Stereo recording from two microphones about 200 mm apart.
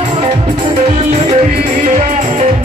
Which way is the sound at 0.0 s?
25° right (ahead or behind).